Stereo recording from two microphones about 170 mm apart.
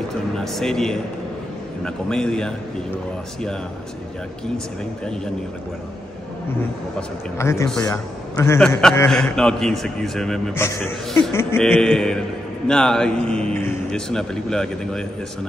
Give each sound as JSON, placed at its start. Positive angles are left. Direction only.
{"t": 0.4, "sound": "a man's voice", "side_deg": 0}
{"t": 7.3, "sound": "a man's voice", "side_deg": 15}
{"t": 10.5, "sound": "a man's voice", "side_deg": 15}